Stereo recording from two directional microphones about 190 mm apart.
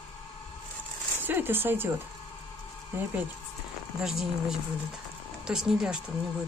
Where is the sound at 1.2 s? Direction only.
10° right (ahead or behind).